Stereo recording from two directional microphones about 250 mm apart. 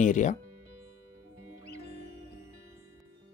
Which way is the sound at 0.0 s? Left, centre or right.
Left.